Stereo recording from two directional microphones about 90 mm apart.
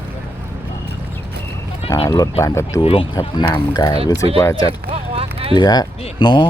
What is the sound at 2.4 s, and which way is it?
Speech, 30° left (ahead or behind).